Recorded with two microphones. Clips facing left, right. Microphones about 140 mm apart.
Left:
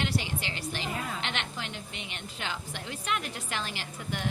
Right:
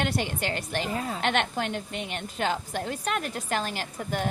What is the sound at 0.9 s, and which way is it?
Speech, 35° right (ahead or behind).